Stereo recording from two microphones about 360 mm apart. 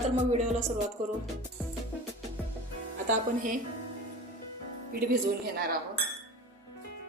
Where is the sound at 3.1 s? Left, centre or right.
Right.